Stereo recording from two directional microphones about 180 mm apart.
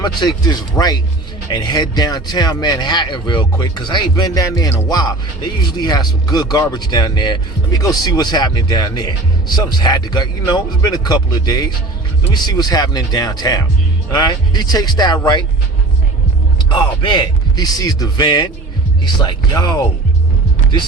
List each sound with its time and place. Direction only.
0.0 s speech: 25° left (ahead or behind)
16.6 s speech: 25° left (ahead or behind)